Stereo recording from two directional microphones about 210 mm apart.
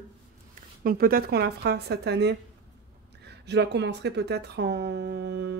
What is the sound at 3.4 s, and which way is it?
Speech, 55° right (ahead or behind).